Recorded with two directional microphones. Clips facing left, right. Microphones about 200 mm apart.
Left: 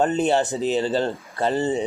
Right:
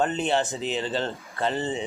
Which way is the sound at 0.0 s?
40° left (ahead or behind).